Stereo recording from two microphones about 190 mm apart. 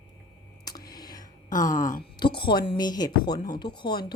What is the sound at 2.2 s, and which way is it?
A woman's voice, 25° left (ahead or behind).